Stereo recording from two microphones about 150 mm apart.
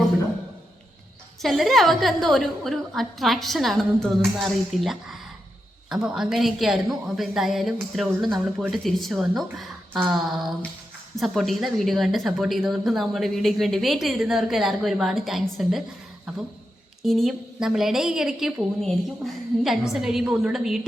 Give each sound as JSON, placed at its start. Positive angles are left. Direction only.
{"t": 1.4, "sound": "a woman's voice", "side_deg": 0}
{"t": 17.0, "sound": "a woman's voice", "side_deg": 0}